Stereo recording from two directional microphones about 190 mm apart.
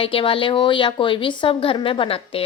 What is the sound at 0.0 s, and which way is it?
A woman's voice, 30° left (ahead or behind).